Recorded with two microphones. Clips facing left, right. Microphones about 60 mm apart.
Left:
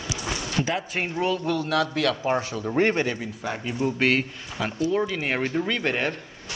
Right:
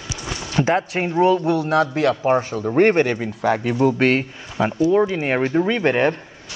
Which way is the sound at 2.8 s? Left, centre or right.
Right.